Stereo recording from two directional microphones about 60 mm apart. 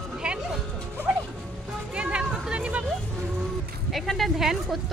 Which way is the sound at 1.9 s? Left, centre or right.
Centre.